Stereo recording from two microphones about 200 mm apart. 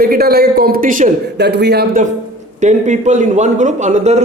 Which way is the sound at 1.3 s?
55° right (ahead or behind).